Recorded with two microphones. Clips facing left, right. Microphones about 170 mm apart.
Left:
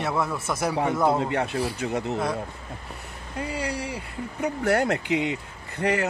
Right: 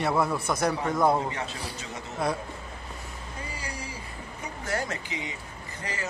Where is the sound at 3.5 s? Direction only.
65° left (ahead or behind).